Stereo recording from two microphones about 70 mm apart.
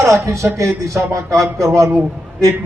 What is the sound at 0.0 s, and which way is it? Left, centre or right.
A man's voice, right.